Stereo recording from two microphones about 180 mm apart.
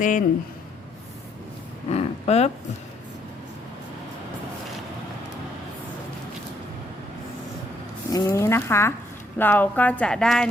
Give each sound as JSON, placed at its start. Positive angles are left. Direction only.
{"t": 0.0, "sound": "speech", "side_deg": 45}
{"t": 1.9, "sound": "speech", "side_deg": 35}
{"t": 8.1, "sound": "a sound", "side_deg": 15}
{"t": 9.4, "sound": "speech", "side_deg": 10}